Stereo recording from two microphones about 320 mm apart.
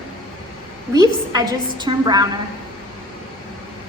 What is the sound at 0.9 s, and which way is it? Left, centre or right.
A woman's voice, centre.